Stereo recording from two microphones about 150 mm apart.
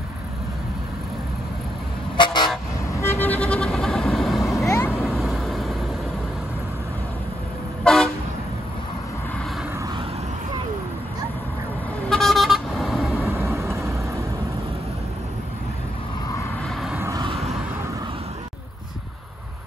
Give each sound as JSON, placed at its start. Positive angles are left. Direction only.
{"t": 2.1, "sound": "toot", "side_deg": 30}
{"t": 2.9, "sound": "vehicle", "side_deg": 15}
{"t": 4.6, "sound": "vehicle", "side_deg": 15}
{"t": 5.0, "sound": "vehicle", "side_deg": 0}
{"t": 7.8, "sound": "toot", "side_deg": 5}
{"t": 12.1, "sound": "vehicle", "side_deg": 0}
{"t": 13.3, "sound": "vehicle", "side_deg": -20}
{"t": 16.6, "sound": "vehicle", "side_deg": 0}
{"t": 17.0, "sound": "vehicle", "side_deg": -25}